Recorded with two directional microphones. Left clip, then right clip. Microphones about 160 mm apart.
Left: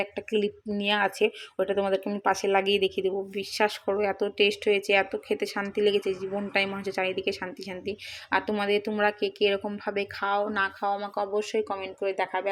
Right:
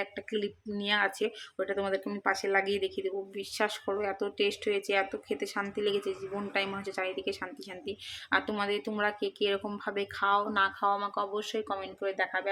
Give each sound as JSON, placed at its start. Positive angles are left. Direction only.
{"t": 0.0, "sound": "speech", "side_deg": 15}